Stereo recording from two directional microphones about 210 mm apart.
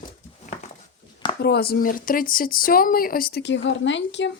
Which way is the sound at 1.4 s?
50° left (ahead or behind).